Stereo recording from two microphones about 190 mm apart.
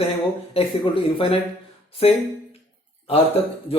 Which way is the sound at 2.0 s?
30° left (ahead or behind).